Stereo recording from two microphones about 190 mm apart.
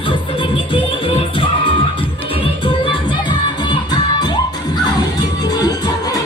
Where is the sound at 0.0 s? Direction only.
25° left (ahead or behind).